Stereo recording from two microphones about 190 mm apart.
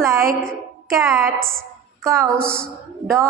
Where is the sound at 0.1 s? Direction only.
50° right (ahead or behind).